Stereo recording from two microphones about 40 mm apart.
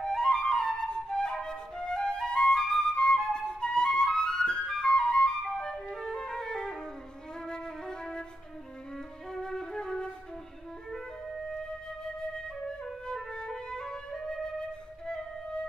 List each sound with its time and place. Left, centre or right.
0.0 s flute: centre
12.2 s music: centre